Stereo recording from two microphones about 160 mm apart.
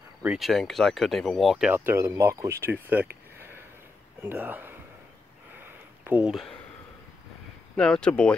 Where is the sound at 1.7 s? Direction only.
15° right (ahead or behind).